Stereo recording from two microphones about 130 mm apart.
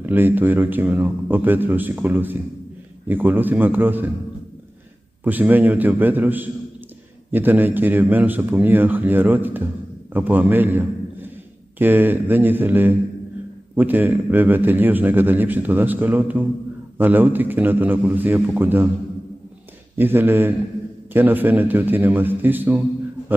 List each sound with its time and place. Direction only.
0.0 s a man's voice: 15° right (ahead or behind)
5.2 s a man's voice: 15° right (ahead or behind)
20.0 s a man's voice: 15° right (ahead or behind)